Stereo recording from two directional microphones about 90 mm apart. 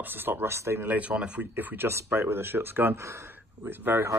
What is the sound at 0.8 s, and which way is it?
Speech, 15° right (ahead or behind).